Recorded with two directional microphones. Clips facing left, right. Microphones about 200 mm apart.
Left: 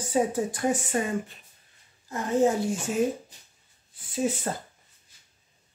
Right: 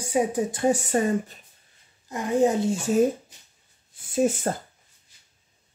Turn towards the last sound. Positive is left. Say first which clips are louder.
# right 5 dB
turn(degrees=-50)  # may be behind; listen again after turning